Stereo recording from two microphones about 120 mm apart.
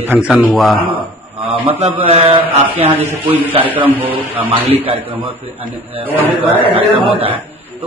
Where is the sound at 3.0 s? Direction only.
15° right (ahead or behind).